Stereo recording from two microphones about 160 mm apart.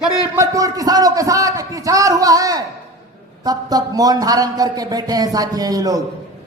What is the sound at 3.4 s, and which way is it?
A man's voice, 25° right (ahead or behind).